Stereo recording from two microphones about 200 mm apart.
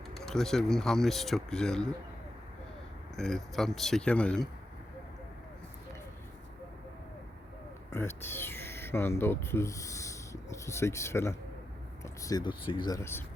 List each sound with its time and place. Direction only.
0.3 s speech: centre (ahead or behind)
3.2 s speech: centre (ahead or behind)
7.9 s speech: 10° left (ahead or behind)